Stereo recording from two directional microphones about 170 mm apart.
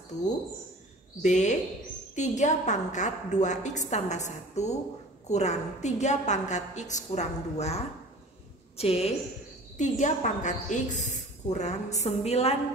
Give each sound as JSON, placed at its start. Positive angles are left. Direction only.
{"t": 1.2, "sound": "a woman's voice", "side_deg": 45}